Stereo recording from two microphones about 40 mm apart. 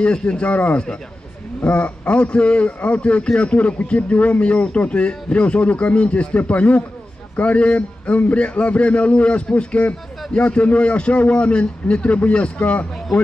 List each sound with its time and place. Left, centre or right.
0.0 s speech: left
1.6 s a man's voice: left